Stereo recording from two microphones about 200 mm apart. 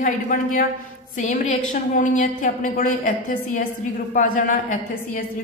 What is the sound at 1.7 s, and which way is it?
A woman's voice, 40° left (ahead or behind).